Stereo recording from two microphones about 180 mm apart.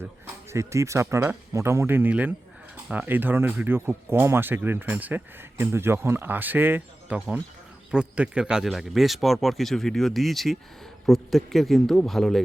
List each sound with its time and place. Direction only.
0.5 s speech: 15° right (ahead or behind); by 12.4 s centre (ahead or behind)